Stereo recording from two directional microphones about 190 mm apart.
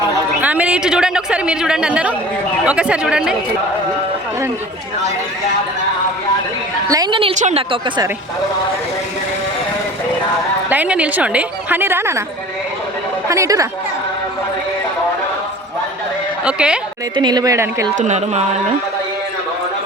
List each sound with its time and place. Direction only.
0.4 s a woman's voice: 5° right (ahead or behind)
6.9 s a woman's voice: 25° right (ahead or behind)
10.7 s a woman's voice: 5° right (ahead or behind)
13.2 s a woman's voice: 15° right (ahead or behind)
16.4 s a woman's voice: 5° right (ahead or behind)
17.2 s a woman's voice: 20° right (ahead or behind)
17.9 s speech: 40° right (ahead or behind)